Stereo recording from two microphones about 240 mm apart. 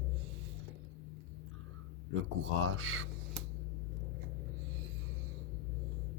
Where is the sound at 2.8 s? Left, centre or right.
Right.